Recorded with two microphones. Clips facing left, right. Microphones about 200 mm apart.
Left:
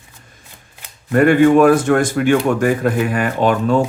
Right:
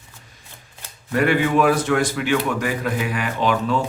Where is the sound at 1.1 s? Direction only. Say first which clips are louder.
Left 8 dB; 50° left (ahead or behind).